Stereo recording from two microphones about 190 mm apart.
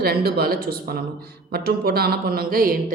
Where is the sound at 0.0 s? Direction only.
55° right (ahead or behind).